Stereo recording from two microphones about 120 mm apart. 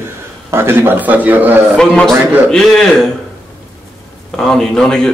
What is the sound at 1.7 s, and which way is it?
A man's voice, 5° left (ahead or behind).